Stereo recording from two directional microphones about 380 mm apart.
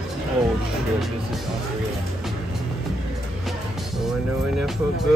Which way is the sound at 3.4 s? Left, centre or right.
Centre.